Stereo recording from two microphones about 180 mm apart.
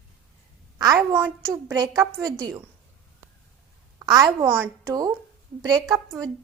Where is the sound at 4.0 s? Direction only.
20° right (ahead or behind).